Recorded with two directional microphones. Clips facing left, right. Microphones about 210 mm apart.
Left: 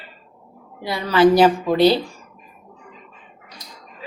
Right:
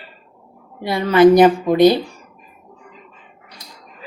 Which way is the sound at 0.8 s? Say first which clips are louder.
Right 4 dB; 25° right (ahead or behind).